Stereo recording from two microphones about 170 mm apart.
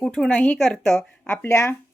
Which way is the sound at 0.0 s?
5° left (ahead or behind).